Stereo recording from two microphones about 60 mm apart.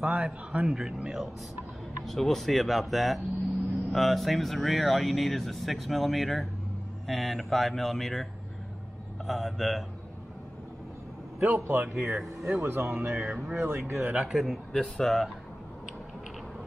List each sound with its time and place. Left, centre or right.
0.0 s a man's voice: centre
2.0 s speech: centre
11.3 s a man's voice: right
11.6 s a man's voice: right
12.0 s speech: centre
12.4 s a man's voice: right
13.6 s a man's voice: right
14.0 s a man's voice: centre
14.5 s speech: centre